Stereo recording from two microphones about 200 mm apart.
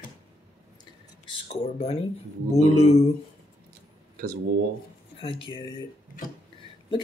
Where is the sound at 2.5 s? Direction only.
30° left (ahead or behind).